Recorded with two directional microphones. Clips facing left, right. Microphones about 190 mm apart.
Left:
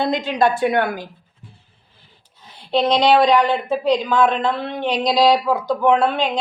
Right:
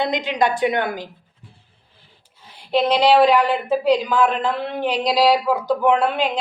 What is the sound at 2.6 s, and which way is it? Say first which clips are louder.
A woman's voice: even; 10° right (ahead or behind).